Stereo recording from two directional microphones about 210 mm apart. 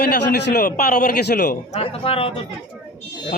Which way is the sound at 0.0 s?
55° left (ahead or behind).